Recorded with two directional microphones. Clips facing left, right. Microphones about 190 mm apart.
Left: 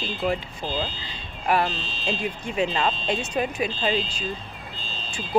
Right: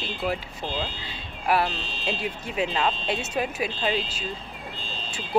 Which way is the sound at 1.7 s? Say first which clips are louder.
Even; 60° right (ahead or behind).